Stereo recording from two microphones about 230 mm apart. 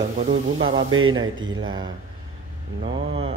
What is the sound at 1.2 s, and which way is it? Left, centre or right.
Mantra, right.